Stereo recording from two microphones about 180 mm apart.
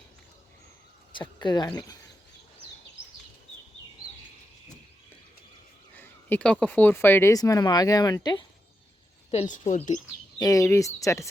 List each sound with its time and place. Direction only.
1.1 s speech: 25° left (ahead or behind)
6.0 s speech: 10° left (ahead or behind)
9.3 s speech: 40° left (ahead or behind)
10.3 s speech: 20° left (ahead or behind)